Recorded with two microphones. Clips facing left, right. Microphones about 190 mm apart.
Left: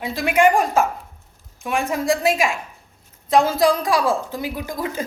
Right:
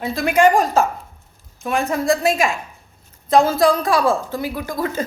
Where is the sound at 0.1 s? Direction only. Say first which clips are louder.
Right 2 dB; 40° right (ahead or behind).